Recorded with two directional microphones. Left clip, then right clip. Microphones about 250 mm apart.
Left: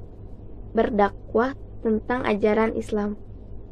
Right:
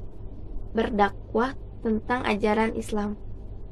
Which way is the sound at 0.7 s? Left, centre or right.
Centre.